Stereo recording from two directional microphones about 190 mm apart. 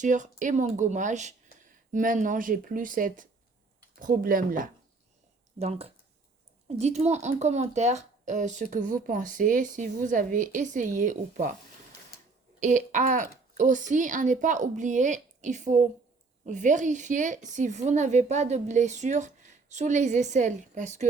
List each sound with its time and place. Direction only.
0.0 s speech: 40° right (ahead or behind)
5.5 s speech: 35° right (ahead or behind)
12.5 s speech: 40° right (ahead or behind)